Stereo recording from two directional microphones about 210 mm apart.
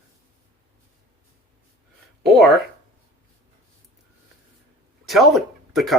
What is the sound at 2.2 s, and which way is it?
Speech, centre (ahead or behind).